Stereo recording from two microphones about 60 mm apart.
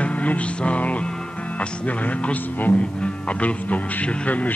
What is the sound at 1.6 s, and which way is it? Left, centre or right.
Speech, left.